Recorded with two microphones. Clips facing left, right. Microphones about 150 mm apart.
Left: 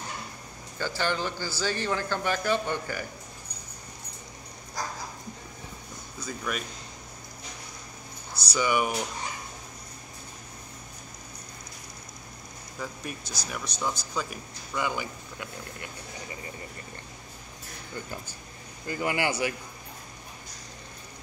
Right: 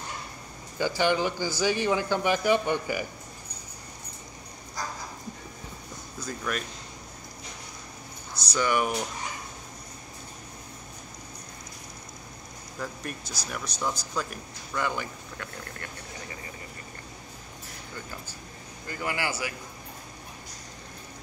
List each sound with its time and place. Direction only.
0.7 s a man's voice: 15° right (ahead or behind)
6.2 s speech: 5° left (ahead or behind)
8.5 s speech: 5° left (ahead or behind)
12.7 s speech: centre (ahead or behind)
18.9 s speech: 20° left (ahead or behind)